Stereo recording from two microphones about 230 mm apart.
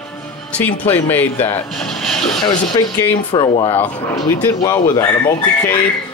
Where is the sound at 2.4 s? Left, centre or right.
Centre.